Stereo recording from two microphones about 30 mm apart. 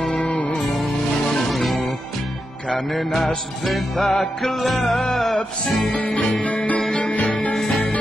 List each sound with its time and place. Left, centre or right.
0.2 s music: left
0.6 s music: centre
2.9 s music: centre
5.9 s music: left
6.4 s music: left